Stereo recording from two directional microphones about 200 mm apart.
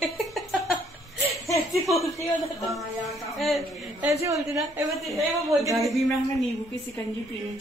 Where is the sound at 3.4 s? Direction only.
Centre (ahead or behind).